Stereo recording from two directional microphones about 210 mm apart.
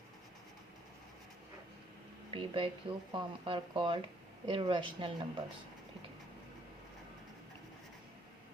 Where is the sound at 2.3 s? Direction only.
25° right (ahead or behind).